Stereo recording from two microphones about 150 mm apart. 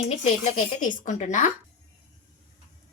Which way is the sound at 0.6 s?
55° left (ahead or behind).